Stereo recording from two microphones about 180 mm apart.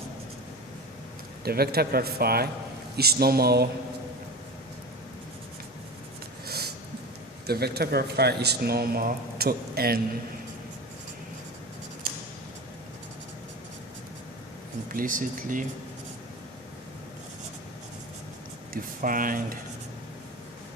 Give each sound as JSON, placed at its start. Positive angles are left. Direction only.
{"t": 1.5, "sound": "speech", "side_deg": -60}
{"t": 7.4, "sound": "speech", "side_deg": -60}
{"t": 14.8, "sound": "speech", "side_deg": -50}
{"t": 18.7, "sound": "speech", "side_deg": -50}